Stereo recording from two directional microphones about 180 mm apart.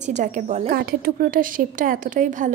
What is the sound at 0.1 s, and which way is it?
Speech, 40° right (ahead or behind).